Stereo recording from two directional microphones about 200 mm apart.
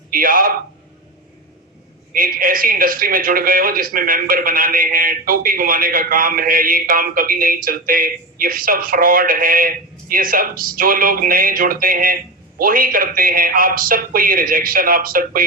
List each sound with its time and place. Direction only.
0.1 s a man's voice: 45° right (ahead or behind)
2.1 s a man's voice: 45° right (ahead or behind)